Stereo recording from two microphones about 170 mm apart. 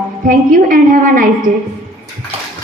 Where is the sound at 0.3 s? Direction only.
55° right (ahead or behind).